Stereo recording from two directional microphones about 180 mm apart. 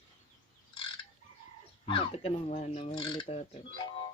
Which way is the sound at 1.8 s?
30° left (ahead or behind).